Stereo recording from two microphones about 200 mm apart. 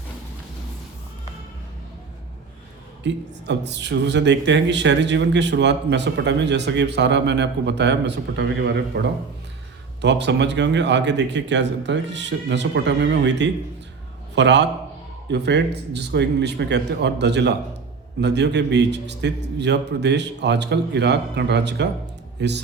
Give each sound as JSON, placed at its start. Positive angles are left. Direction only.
{"t": 3.0, "sound": "speech", "side_deg": -60}
{"t": 10.0, "sound": "speech", "side_deg": -60}